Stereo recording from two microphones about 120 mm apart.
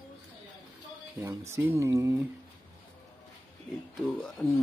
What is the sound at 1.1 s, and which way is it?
Speech, 25° right (ahead or behind).